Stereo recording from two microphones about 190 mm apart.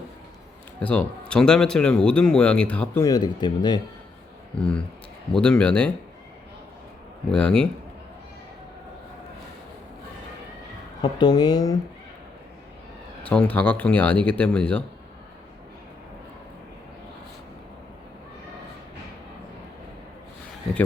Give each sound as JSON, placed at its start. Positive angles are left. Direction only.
{"t": 0.8, "sound": "speech", "side_deg": 5}
{"t": 4.5, "sound": "speech", "side_deg": 5}
{"t": 7.3, "sound": "speech", "side_deg": 5}
{"t": 11.0, "sound": "speech", "side_deg": 20}
{"t": 13.2, "sound": "speech", "side_deg": 5}